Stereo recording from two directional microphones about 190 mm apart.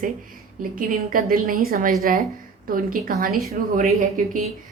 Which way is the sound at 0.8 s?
45° right (ahead or behind).